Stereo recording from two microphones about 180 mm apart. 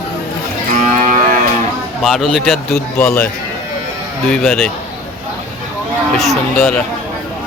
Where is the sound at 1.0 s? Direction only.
45° right (ahead or behind).